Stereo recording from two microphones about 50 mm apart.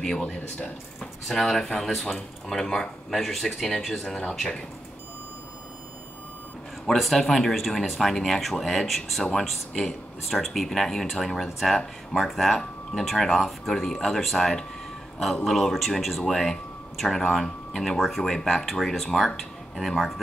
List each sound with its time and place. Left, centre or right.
0.2 s speech: left
1.2 s speech: centre
4.0 s speech: centre
7.0 s speech: centre